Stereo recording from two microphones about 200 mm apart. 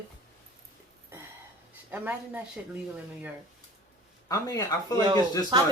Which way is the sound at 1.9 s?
10° right (ahead or behind).